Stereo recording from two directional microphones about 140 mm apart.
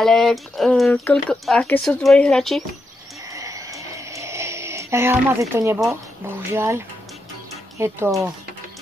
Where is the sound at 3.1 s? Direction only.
20° right (ahead or behind).